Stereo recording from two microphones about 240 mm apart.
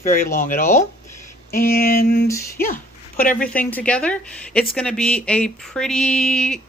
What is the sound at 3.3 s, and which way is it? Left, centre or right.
Speech, centre.